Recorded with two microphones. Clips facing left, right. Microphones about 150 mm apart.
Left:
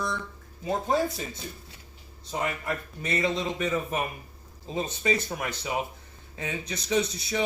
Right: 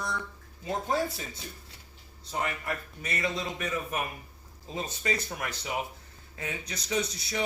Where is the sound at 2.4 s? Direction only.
25° left (ahead or behind).